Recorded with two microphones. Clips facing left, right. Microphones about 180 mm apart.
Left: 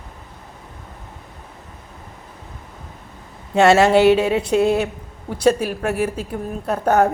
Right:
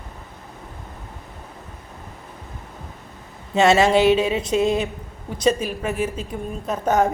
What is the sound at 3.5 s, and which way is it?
Speech, 65° left (ahead or behind).